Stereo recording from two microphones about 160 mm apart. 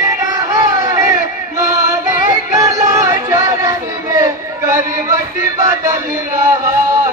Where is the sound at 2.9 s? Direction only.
20° right (ahead or behind).